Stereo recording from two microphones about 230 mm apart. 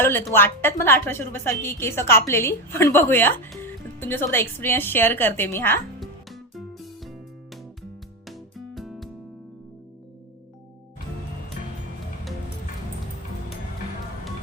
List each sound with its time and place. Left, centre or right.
0.0 s a woman's voice: centre
6.5 s music: centre
8.3 s music: centre